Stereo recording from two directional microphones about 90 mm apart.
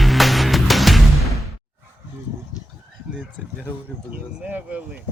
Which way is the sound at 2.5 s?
40° left (ahead or behind).